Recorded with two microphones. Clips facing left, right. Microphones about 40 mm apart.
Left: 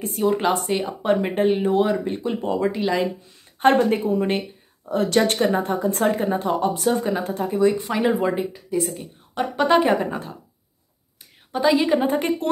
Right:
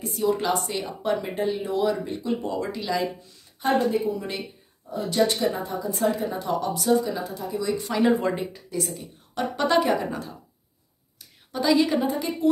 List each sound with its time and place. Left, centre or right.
0.0 s speech: left
3.5 s speech: left
4.1 s speech: left
4.8 s speech: left
7.0 s speech: left
8.1 s speech: centre
8.7 s speech: left
9.8 s speech: left
11.5 s speech: left
12.1 s speech: left